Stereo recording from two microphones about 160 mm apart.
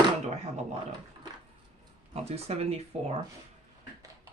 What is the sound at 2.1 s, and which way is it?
Speech, 40° right (ahead or behind).